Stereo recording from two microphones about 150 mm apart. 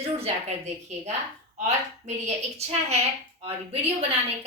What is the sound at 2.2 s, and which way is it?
A woman's voice, 45° right (ahead or behind).